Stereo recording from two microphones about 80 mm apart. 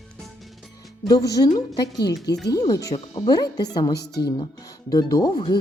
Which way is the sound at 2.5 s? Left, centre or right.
Left.